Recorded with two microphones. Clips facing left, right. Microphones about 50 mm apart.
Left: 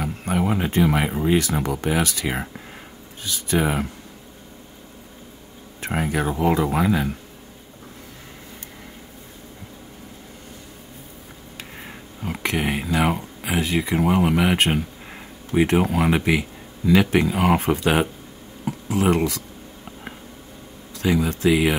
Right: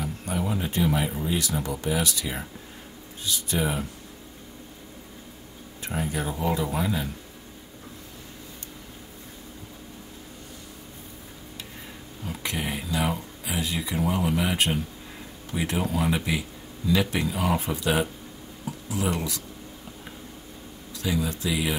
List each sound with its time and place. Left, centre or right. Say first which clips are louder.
0.0 s a sound: left 6 dB; left
1.2 s speech: left 7 dB; left
5.8 s speech: left 6 dB; left
12.3 s speech: left 7 dB; left
20.9 s speech: left 6 dB; left